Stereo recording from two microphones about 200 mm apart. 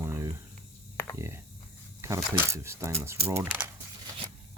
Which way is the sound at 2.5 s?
15° right (ahead or behind).